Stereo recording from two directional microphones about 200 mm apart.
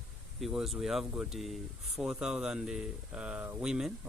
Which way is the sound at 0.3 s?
Centre (ahead or behind).